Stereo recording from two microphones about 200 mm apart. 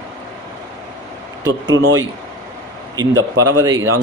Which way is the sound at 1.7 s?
70° right (ahead or behind).